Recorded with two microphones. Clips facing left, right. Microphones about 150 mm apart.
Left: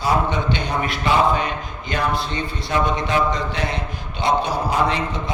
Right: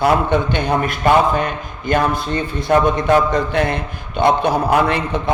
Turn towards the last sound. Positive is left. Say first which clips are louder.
# right 4 dB
turn(degrees=-60)  # may be behind; listen again after turning